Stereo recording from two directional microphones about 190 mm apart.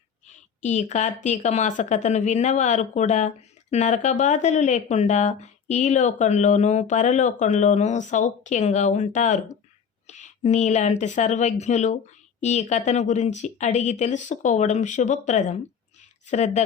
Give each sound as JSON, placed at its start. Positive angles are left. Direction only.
{"t": 0.3, "sound": "a woman's voice", "side_deg": 40}